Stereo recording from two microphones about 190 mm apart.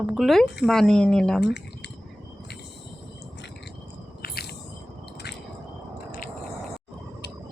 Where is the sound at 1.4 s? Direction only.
65° left (ahead or behind).